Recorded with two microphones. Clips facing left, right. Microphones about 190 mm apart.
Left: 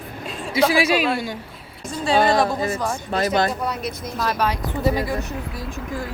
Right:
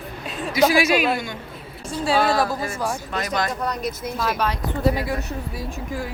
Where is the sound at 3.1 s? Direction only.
30° left (ahead or behind).